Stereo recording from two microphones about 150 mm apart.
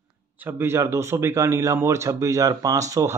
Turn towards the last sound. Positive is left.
turn(degrees=-20)  # may be behind; listen again after turning